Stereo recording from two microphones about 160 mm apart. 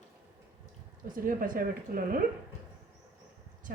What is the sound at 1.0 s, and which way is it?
A woman's voice, 55° right (ahead or behind).